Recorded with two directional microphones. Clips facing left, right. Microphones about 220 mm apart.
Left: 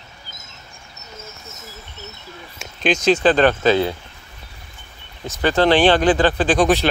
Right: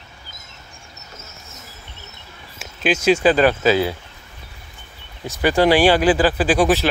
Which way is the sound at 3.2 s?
5° right (ahead or behind).